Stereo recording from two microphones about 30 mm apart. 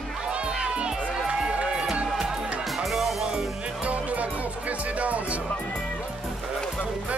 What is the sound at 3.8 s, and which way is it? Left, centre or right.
Music, right.